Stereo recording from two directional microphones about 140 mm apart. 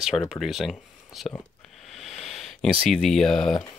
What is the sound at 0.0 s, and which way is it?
Speech, centre (ahead or behind).